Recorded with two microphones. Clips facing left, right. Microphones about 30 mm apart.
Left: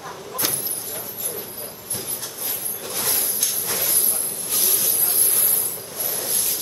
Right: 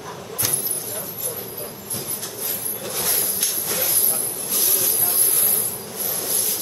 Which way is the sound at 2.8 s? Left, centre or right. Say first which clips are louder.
Even; centre.